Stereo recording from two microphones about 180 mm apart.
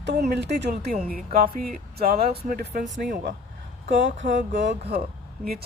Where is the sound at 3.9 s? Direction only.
85° right.